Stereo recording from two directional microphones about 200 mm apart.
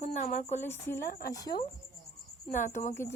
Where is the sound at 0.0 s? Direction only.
35° left (ahead or behind).